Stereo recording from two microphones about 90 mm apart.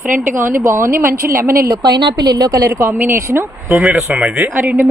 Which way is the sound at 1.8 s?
50° right (ahead or behind).